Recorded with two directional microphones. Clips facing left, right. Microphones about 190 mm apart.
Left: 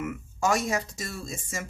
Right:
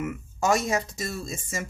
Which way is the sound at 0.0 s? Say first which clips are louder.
Right 1 dB; 25° right (ahead or behind).